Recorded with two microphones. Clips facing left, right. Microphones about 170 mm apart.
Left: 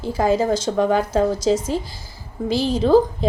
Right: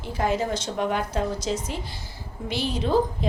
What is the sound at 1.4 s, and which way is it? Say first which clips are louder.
A woman's voice: left 9 dB; 90° left.